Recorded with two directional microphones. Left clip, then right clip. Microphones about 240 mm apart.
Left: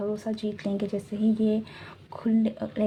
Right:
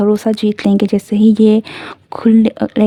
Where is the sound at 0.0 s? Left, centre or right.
Right.